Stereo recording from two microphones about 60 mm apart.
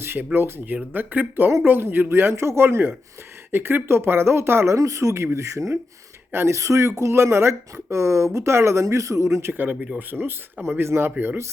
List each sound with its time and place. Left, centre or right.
0.0 s a sound: right
0.3 s speech: right
4.7 s speech: right
9.4 s speech: right